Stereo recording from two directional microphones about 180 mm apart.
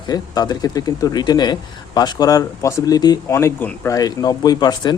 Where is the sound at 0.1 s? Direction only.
20° left (ahead or behind).